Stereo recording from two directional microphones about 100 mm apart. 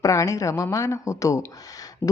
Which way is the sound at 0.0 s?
30° left (ahead or behind).